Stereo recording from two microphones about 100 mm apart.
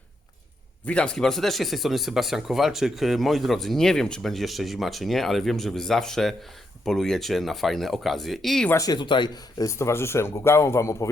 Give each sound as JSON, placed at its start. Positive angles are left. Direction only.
{"t": 0.9, "sound": "speech", "side_deg": 10}
{"t": 8.7, "sound": "speech", "side_deg": 35}
{"t": 9.0, "sound": "speech", "side_deg": 50}